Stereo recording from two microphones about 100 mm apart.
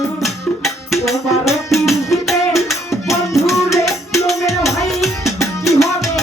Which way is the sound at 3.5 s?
30° left (ahead or behind).